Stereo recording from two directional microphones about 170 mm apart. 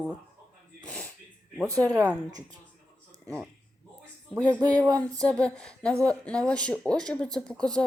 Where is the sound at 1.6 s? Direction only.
20° right (ahead or behind).